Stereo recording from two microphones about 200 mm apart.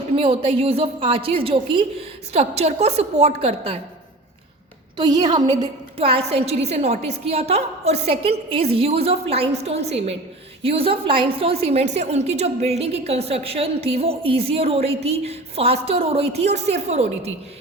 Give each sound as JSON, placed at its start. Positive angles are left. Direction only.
{"t": 0.2, "sound": "a woman's voice", "side_deg": -25}
{"t": 4.9, "sound": "a woman's voice", "side_deg": -20}